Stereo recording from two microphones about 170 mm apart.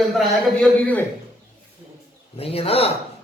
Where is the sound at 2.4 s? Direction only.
35° left (ahead or behind).